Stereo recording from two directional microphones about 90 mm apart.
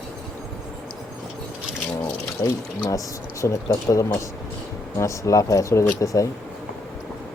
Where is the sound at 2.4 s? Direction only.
40° left (ahead or behind).